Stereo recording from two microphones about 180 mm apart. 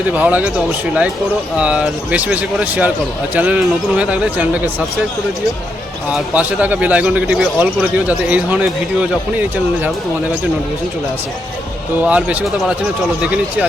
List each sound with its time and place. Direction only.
0.1 s speech: 10° right (ahead or behind)
1.5 s speech: 5° right (ahead or behind)
6.1 s speech: 10° right (ahead or behind)
12.0 s speech: 5° right (ahead or behind)